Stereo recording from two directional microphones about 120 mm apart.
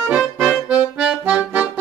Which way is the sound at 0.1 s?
10° right (ahead or behind).